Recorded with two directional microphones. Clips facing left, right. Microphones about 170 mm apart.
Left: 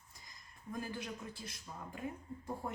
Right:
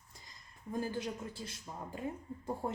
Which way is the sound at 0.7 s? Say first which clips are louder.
Right 5 dB; 30° right (ahead or behind).